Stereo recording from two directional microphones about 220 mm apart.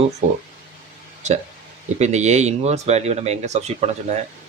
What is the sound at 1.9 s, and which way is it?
Speech, 30° right (ahead or behind).